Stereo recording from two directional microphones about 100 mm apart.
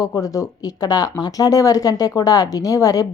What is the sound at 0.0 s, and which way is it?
A woman's voice, 35° left (ahead or behind).